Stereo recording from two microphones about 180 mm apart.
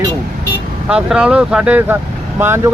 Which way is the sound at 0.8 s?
5° right (ahead or behind).